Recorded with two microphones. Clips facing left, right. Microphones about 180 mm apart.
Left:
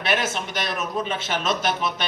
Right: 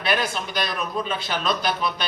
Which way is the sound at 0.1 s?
20° left (ahead or behind).